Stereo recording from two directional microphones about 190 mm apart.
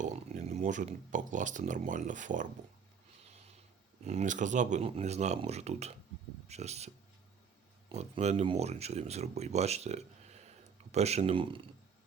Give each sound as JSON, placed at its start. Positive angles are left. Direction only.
{"t": 0.0, "sound": "speech", "side_deg": -35}
{"t": 4.0, "sound": "speech", "side_deg": -35}